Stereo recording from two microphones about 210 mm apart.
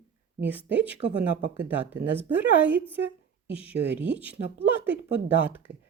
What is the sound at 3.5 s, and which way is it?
Speech, 5° right (ahead or behind).